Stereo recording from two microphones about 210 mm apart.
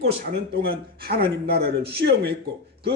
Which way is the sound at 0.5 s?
50° right (ahead or behind).